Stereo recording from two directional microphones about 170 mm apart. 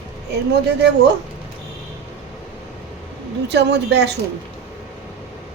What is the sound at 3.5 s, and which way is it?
Speech, 85° right.